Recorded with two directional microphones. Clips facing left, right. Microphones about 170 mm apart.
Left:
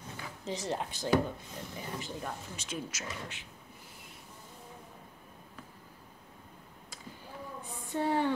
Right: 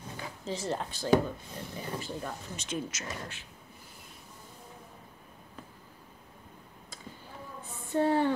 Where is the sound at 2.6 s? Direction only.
5° left (ahead or behind).